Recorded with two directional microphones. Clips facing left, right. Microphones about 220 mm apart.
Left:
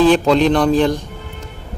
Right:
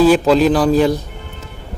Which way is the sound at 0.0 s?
5° right (ahead or behind).